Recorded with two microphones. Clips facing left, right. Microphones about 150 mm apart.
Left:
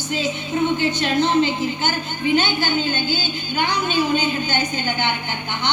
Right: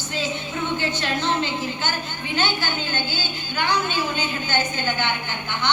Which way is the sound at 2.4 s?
15° left (ahead or behind).